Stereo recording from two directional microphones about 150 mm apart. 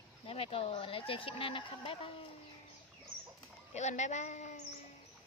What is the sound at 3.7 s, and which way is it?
Speech, 50° left (ahead or behind).